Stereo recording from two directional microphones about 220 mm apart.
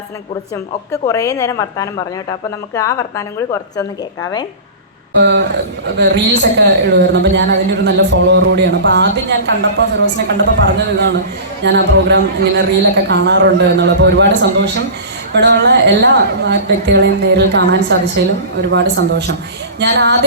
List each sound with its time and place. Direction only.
0.9 s a woman's voice: 15° left (ahead or behind)
5.2 s a woman's voice: 50° right (ahead or behind)